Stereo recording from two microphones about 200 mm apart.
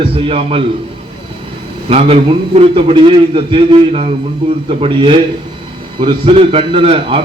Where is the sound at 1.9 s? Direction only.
30° right (ahead or behind).